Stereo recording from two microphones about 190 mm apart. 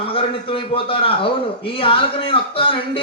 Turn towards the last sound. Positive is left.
turn(degrees=30)  # may be behind; listen again after turning